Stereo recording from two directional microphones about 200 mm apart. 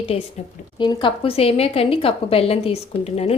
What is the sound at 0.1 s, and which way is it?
A woman's voice, 30° left (ahead or behind).